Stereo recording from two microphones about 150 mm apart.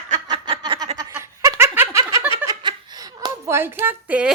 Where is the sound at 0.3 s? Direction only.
30° right (ahead or behind).